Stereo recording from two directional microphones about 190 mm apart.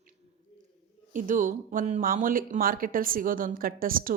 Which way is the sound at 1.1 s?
45° right (ahead or behind).